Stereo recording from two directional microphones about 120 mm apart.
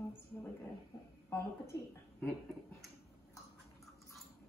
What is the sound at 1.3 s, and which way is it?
Speech, 20° left (ahead or behind).